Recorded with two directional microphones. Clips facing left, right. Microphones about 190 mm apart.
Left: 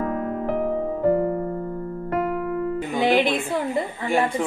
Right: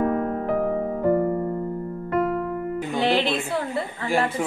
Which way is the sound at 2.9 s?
10° left (ahead or behind).